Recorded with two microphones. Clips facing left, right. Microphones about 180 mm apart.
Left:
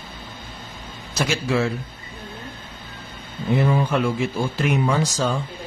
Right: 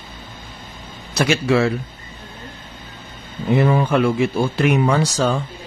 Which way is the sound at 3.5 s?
70° right (ahead or behind).